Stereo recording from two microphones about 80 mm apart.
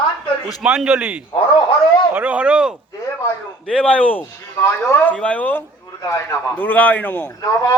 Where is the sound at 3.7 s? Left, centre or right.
Centre; by 5.1 s left.